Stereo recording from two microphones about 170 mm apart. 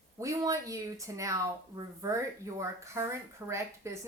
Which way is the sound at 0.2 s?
20° right (ahead or behind).